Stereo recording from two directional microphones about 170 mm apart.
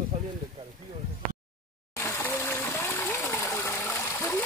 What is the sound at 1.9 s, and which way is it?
Gush, 15° left (ahead or behind).